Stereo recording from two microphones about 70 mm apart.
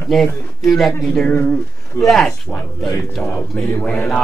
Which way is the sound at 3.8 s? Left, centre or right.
Centre.